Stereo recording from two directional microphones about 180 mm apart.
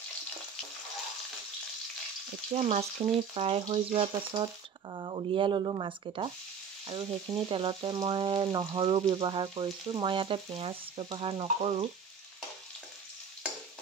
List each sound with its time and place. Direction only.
2.5 s speech: 35° right (ahead or behind)
4.9 s frying: 25° right (ahead or behind)